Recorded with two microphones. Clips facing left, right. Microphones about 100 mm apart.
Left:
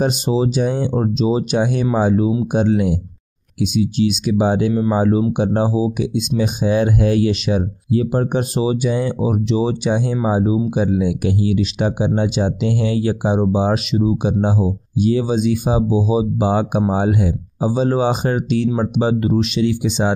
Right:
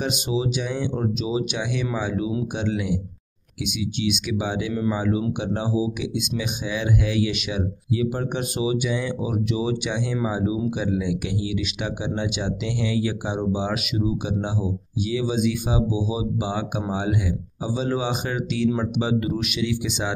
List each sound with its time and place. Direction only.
0.0 s speech: 40° left (ahead or behind)